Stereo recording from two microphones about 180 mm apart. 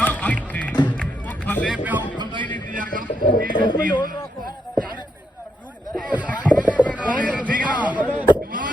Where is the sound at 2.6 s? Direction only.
45° right (ahead or behind).